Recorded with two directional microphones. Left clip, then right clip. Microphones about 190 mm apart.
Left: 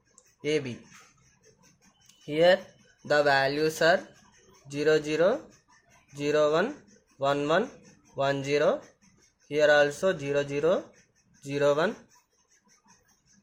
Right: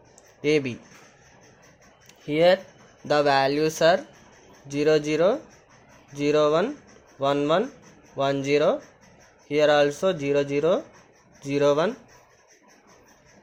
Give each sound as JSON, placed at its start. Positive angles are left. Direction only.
{"t": 0.4, "sound": "speech", "side_deg": -25}
{"t": 2.2, "sound": "speech", "side_deg": -20}